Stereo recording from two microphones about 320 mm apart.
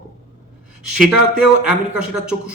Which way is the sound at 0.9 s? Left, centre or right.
Centre.